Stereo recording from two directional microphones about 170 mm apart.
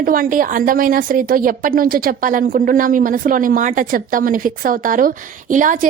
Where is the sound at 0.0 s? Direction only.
55° right (ahead or behind).